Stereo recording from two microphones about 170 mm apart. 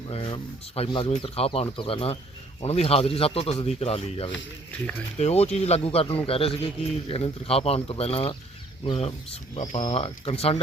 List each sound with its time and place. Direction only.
0.1 s speech: 30° left (ahead or behind)